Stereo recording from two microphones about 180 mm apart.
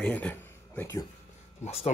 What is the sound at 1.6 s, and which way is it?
Speech, 35° left (ahead or behind).